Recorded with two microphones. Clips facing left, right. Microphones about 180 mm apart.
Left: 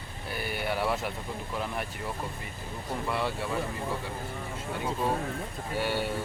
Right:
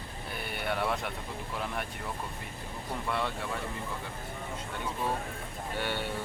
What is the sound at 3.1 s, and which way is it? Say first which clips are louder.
Speech: left 2 dB; 5° left (ahead or behind).